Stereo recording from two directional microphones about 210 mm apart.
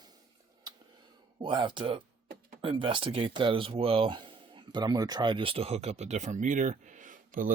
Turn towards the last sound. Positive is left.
turn(degrees=-40)  # may be behind; listen again after turning